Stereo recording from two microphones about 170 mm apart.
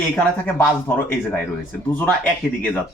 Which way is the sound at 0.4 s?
10° left (ahead or behind).